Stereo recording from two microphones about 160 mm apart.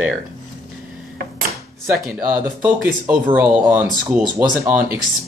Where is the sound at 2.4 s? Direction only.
10° right (ahead or behind).